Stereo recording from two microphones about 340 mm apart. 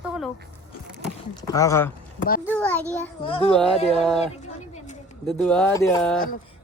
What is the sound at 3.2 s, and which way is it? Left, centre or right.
Speech, centre.